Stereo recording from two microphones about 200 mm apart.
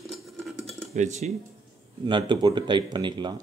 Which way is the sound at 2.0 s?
25° right (ahead or behind).